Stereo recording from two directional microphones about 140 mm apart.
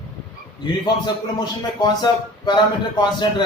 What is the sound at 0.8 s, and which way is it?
Speech, 30° left (ahead or behind).